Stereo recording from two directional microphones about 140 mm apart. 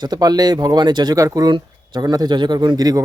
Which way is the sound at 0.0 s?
30° right (ahead or behind).